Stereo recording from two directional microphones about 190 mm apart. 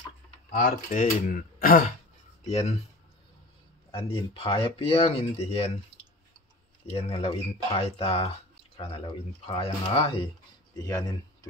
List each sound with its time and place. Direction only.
0.5 s speech: 45° left (ahead or behind)
2.4 s speech: 35° left (ahead or behind)
3.9 s speech: 25° left (ahead or behind)
7.0 s speech: 30° left (ahead or behind)
9.5 s speech: 25° left (ahead or behind)